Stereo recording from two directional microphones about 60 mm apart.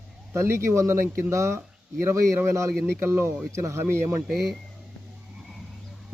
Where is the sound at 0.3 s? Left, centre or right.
Right.